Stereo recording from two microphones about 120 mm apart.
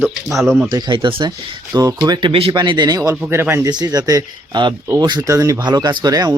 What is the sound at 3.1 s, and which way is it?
Speech, 15° right (ahead or behind).